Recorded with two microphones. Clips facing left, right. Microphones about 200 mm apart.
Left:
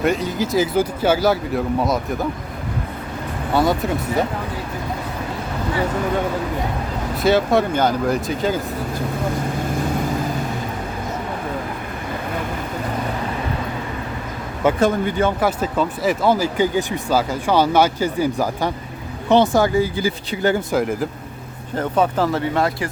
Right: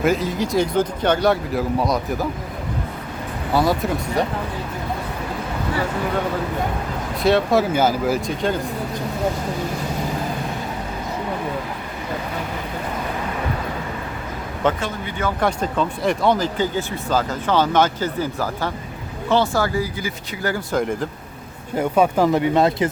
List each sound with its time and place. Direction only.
0.0 s speech: centre (ahead or behind)
3.5 s speech: centre (ahead or behind)
7.2 s speech: centre (ahead or behind)
14.8 s speech: 50° left (ahead or behind)
15.4 s speech: 5° left (ahead or behind); by 20.7 s 20° left (ahead or behind)
20.7 s speech: 5° left (ahead or behind)
21.8 s speech: 10° right (ahead or behind)